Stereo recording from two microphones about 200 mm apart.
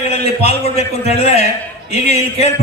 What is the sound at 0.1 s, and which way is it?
A man's voice, 30° left (ahead or behind).